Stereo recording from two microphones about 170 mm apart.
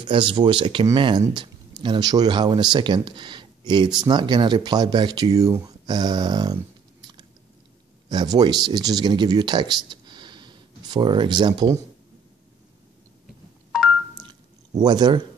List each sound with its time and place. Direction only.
0.0 s speech: 30° right (ahead or behind)
13.7 s telephone dialing: centre (ahead or behind)
14.2 s telephone dialing: 25° right (ahead or behind)